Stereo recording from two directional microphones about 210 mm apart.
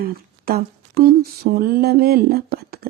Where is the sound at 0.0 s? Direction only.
45° right (ahead or behind).